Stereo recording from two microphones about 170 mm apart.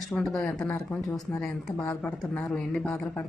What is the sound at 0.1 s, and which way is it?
A woman's voice, centre (ahead or behind).